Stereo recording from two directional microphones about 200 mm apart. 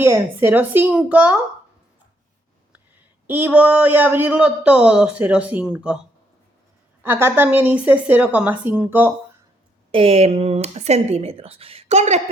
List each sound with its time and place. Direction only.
0.0 s speech: 10° right (ahead or behind)
3.2 s speech: 10° right (ahead or behind)
7.0 s speech: 10° right (ahead or behind)
9.9 s speech: 30° right (ahead or behind)